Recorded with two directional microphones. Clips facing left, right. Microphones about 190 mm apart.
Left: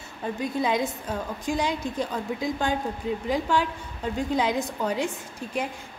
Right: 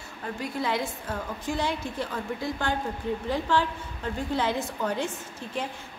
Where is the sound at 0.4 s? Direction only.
20° left (ahead or behind).